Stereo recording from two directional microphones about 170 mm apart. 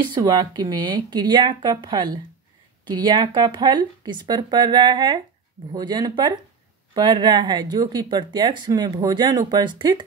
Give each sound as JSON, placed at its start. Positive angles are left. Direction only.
{"t": 0.0, "sound": "speech", "side_deg": -25}